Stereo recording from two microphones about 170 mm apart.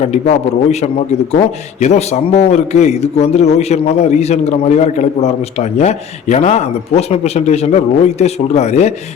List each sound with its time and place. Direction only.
0.0 s a man's voice: 40° left (ahead or behind)